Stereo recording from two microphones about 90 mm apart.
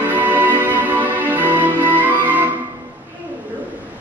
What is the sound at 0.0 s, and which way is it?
Music, 20° right (ahead or behind).